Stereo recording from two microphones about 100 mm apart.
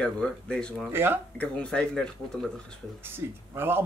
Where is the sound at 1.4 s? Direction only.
10° left (ahead or behind).